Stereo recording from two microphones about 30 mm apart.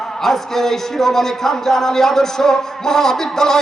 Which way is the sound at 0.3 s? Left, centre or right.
Centre.